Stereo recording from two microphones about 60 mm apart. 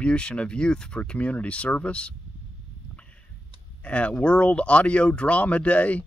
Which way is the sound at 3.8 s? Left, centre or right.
Left.